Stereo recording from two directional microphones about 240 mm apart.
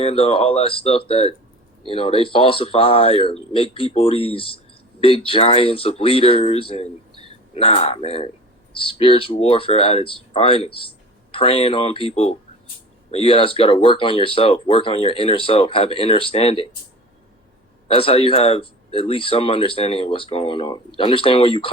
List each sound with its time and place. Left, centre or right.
0.0 s speech: left
17.8 s speech: left